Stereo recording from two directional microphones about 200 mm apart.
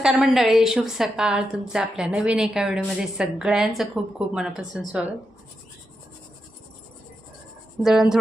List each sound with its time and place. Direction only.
0.0 s a woman's voice: 5° right (ahead or behind)
7.8 s a woman's voice: centre (ahead or behind)